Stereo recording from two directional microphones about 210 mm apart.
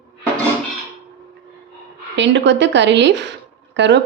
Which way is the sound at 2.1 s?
60° right (ahead or behind).